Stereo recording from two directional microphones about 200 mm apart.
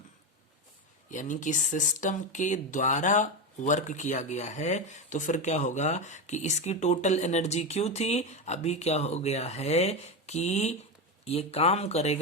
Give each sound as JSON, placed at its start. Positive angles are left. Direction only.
{"t": 1.1, "sound": "speech", "side_deg": 40}